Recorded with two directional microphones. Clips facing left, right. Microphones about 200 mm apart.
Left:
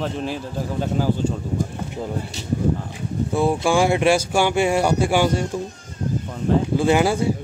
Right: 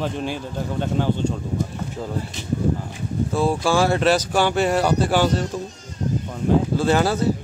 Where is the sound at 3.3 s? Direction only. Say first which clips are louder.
Left 1 dB; 15° left (ahead or behind).